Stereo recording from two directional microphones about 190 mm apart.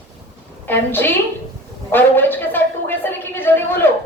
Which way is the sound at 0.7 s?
10° left (ahead or behind).